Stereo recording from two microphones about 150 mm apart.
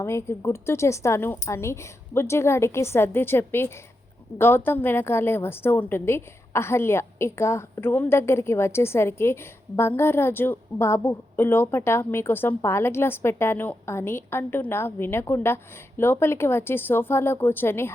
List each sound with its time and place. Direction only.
0.0 s a woman's voice: 20° left (ahead or behind)